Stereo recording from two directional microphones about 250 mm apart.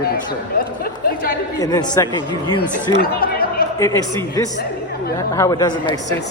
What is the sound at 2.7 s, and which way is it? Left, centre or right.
Speech, left.